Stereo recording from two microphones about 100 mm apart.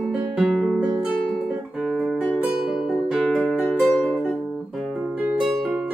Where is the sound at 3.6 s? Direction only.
15° left (ahead or behind).